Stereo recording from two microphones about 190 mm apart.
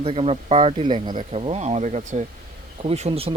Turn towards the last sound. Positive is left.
turn(degrees=-30)  # may be behind; listen again after turning